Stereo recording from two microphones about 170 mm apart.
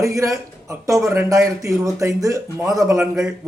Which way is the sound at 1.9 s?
20° right (ahead or behind).